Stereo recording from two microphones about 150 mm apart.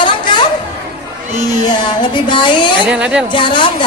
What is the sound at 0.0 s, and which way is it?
Chatter, 30° left (ahead or behind).